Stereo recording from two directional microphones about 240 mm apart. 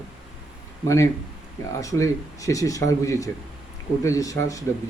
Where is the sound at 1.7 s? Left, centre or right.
Centre.